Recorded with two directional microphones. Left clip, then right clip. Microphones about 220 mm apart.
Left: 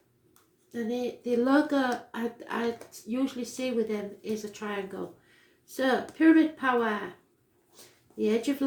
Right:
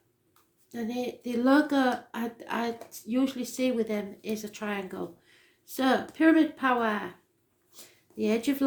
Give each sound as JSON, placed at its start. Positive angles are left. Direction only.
{"t": 0.7, "sound": "speech", "side_deg": -40}
{"t": 7.8, "sound": "a sound", "side_deg": -40}
{"t": 8.2, "sound": "speech", "side_deg": -40}